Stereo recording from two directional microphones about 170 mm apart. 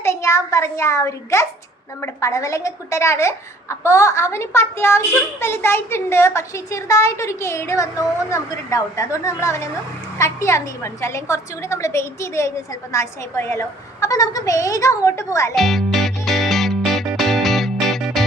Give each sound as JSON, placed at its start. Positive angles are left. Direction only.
{"t": 0.0, "sound": "a woman's voice", "side_deg": 15}
{"t": 15.5, "sound": "music", "side_deg": 0}